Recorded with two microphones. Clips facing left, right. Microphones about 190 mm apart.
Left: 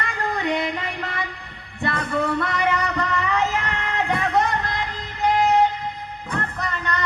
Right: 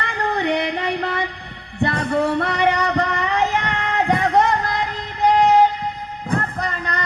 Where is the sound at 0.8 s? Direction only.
35° right (ahead or behind).